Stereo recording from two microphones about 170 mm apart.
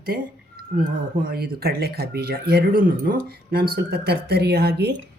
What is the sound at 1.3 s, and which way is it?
Speech, 65° right (ahead or behind).